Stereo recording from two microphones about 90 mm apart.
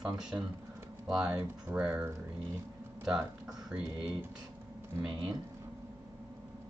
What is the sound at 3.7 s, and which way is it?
Speech, 10° right (ahead or behind).